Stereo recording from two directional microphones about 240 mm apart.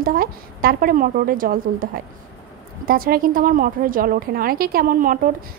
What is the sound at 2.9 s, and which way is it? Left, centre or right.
A woman's voice, right.